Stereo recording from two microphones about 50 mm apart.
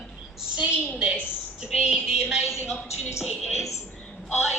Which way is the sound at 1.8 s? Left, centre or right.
Centre.